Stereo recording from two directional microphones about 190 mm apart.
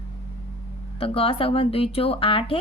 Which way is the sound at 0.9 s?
30° left (ahead or behind).